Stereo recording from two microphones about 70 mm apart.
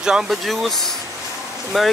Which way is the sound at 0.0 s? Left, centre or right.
Centre.